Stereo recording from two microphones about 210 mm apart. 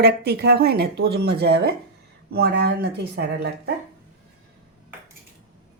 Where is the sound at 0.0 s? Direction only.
50° right (ahead or behind).